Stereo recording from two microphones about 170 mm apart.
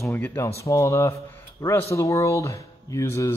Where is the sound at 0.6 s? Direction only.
15° left (ahead or behind).